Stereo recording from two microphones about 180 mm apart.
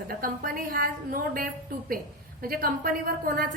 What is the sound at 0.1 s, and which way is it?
A woman's voice, 50° right (ahead or behind).